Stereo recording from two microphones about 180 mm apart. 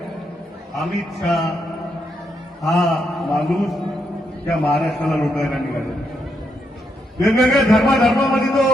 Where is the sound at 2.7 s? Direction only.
20° left (ahead or behind).